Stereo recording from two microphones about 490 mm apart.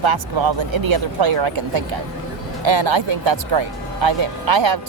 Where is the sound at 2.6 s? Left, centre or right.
Right.